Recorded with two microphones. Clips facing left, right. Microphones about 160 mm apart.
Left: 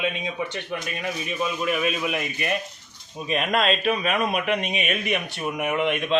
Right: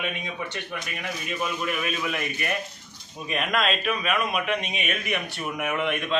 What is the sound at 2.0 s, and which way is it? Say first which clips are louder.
Speech: left 2 dB; 20° left (ahead or behind).